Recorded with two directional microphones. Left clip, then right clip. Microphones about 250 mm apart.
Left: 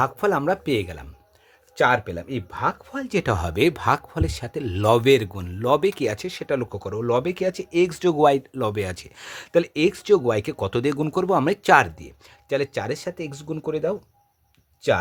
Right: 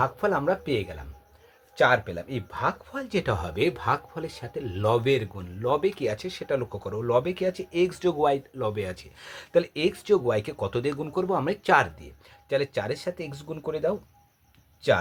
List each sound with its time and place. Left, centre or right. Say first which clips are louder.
0.0 s speech: left 3 dB; left